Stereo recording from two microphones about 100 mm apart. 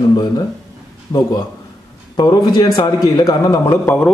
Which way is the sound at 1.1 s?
40° left (ahead or behind).